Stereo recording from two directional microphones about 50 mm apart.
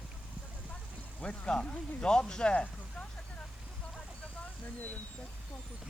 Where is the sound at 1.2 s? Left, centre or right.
Centre.